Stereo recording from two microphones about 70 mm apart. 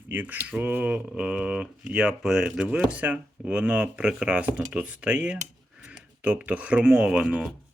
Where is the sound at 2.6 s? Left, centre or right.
Centre.